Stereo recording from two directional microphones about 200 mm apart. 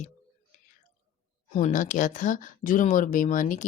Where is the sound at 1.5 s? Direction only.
40° left (ahead or behind).